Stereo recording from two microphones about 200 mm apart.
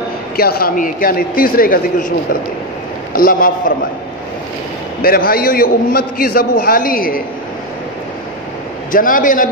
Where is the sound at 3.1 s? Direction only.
45° left (ahead or behind).